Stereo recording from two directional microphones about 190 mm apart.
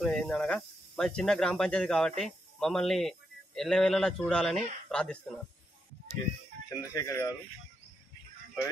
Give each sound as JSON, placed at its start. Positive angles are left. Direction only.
{"t": 0.0, "sound": "speech", "side_deg": 5}
{"t": 6.7, "sound": "speech", "side_deg": 20}